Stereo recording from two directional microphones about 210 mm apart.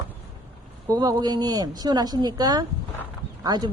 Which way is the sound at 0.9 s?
15° right (ahead or behind).